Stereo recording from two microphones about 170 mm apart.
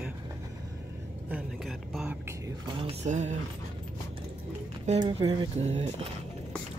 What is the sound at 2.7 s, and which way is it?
Speech, 35° right (ahead or behind).